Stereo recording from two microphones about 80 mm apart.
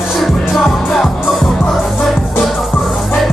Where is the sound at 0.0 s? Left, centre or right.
Centre.